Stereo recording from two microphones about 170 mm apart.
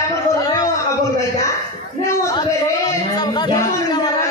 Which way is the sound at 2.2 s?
20° left (ahead or behind).